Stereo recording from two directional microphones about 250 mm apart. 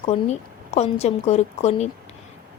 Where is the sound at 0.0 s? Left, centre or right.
Left.